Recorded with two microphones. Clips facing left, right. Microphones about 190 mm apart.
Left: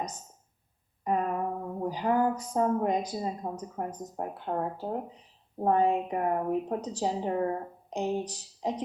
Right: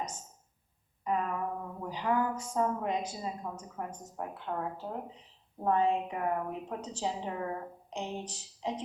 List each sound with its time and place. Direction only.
1.0 s a woman's voice: 35° left (ahead or behind)